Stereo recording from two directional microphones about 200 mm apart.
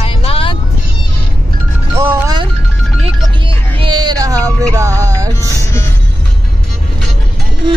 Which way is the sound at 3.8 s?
20° right (ahead or behind).